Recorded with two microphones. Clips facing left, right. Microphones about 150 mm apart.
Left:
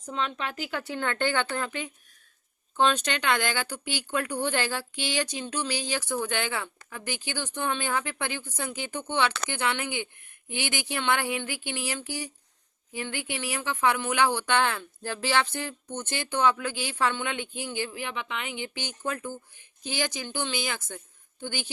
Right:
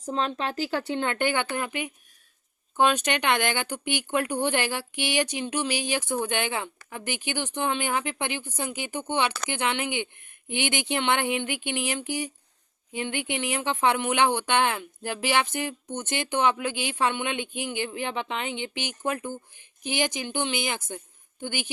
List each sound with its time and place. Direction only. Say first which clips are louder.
0.0 s speech: right 4 dB; 35° right (ahead or behind); by 21.7 s 15° right (ahead or behind)